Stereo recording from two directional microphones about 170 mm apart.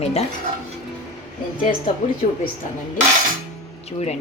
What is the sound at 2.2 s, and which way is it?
Speech, 45° left (ahead or behind).